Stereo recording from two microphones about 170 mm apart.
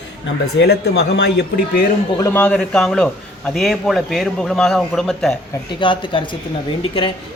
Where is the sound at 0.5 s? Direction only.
70° left (ahead or behind).